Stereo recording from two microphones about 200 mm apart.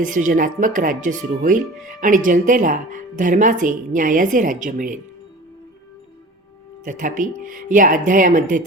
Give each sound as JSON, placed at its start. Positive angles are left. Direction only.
{"t": 0.0, "sound": "speech", "side_deg": -40}
{"t": 6.8, "sound": "speech", "side_deg": -40}